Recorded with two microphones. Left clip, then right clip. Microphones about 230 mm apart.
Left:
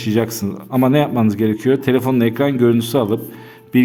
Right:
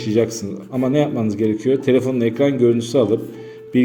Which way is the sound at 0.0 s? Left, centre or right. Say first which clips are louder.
Right 1 dB; left.